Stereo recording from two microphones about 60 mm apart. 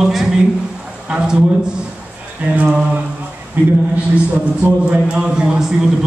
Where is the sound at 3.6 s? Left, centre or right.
Right.